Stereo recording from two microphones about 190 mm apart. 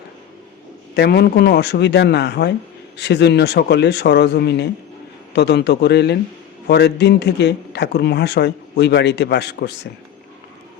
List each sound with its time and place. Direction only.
0.9 s a man's voice: 60° left (ahead or behind)